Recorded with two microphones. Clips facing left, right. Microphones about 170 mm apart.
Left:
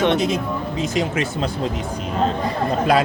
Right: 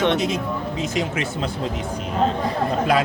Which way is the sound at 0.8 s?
35° left (ahead or behind).